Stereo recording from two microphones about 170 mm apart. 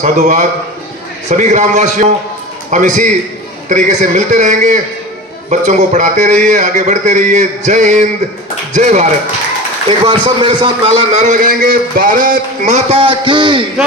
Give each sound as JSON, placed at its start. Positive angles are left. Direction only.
{"t": 0.0, "sound": "a man's voice", "side_deg": -45}
{"t": 10.1, "sound": "a man's voice", "side_deg": -25}